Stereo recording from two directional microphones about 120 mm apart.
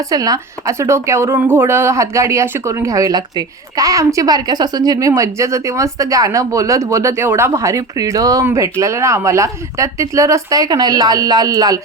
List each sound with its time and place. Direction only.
0.1 s speech: 30° right (ahead or behind)